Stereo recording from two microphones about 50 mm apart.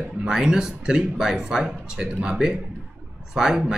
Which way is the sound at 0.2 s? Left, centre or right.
Centre.